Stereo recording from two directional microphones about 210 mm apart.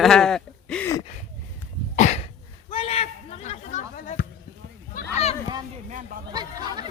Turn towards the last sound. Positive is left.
turn(degrees=-20)  # may be behind; listen again after turning